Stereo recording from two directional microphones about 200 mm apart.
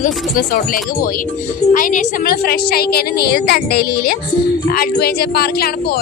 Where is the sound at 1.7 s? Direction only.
40° left (ahead or behind).